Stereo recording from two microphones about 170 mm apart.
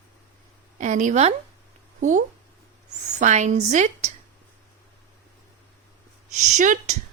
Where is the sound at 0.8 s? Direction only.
45° right (ahead or behind).